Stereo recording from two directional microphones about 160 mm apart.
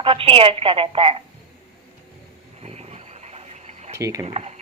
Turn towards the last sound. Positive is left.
turn(degrees=-40)  # may be behind; listen again after turning